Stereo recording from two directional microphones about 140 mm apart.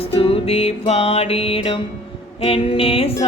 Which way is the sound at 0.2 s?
45° left (ahead or behind).